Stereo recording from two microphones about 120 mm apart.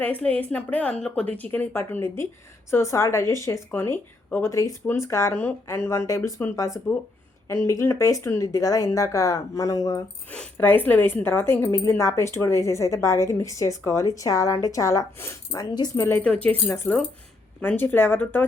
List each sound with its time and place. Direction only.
0.0 s a woman's voice: 10° left (ahead or behind); by 10.0 s 25° left (ahead or behind)
10.6 s a woman's voice: 15° left (ahead or behind)